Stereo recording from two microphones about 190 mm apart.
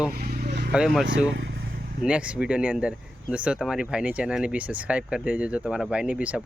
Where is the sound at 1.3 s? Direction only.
70° right (ahead or behind).